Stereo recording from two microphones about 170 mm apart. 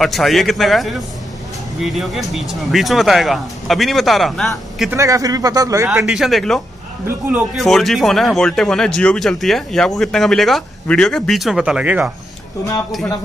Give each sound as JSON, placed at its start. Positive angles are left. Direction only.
{"t": 0.0, "sound": "speech", "side_deg": 0}
{"t": 4.9, "sound": "speech", "side_deg": -20}
{"t": 6.0, "sound": "speech", "side_deg": 0}
{"t": 7.1, "sound": "speech", "side_deg": -10}
{"t": 7.5, "sound": "speech", "side_deg": 0}